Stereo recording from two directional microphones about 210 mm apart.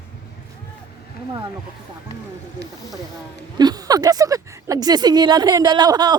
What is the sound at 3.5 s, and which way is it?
Speech, 20° right (ahead or behind).